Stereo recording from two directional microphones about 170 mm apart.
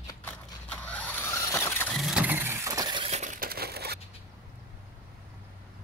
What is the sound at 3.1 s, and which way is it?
Crushing, 45° right (ahead or behind).